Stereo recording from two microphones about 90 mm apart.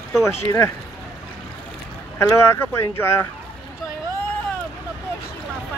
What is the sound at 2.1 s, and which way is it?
Speech, 30° left (ahead or behind).